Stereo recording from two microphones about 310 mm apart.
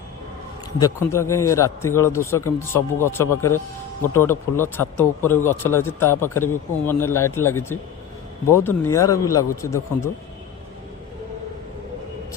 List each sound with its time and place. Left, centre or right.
0.8 s a man's voice: centre